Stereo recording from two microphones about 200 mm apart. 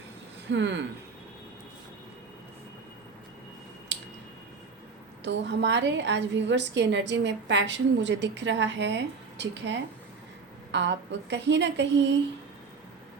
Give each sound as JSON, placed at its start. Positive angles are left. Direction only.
{"t": 0.4, "sound": "a woman's voice", "side_deg": -65}
{"t": 3.9, "sound": "a sound", "side_deg": -60}
{"t": 5.2, "sound": "a woman's voice", "side_deg": -60}